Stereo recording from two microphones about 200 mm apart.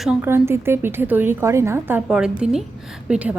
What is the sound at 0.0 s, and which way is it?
A woman's voice, 10° right (ahead or behind).